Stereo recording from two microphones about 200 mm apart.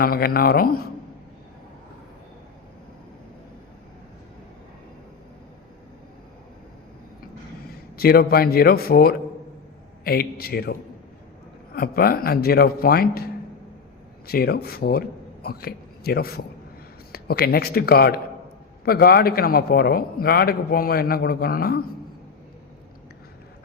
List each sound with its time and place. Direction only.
0.0 s a man's voice: 50° left (ahead or behind)
7.9 s a man's voice: 50° left (ahead or behind)
14.3 s a man's voice: 50° left (ahead or behind)